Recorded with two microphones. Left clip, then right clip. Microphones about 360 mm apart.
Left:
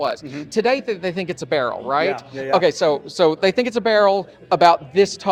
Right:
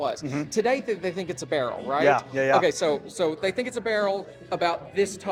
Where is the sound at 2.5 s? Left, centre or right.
Left.